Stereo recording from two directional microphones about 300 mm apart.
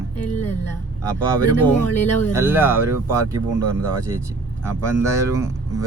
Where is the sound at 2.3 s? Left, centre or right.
Centre.